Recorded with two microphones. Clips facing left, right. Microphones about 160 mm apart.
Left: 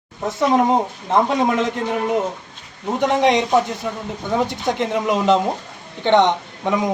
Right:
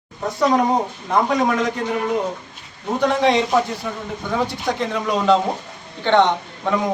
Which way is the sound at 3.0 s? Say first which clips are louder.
Left 1 dB; 20° left (ahead or behind).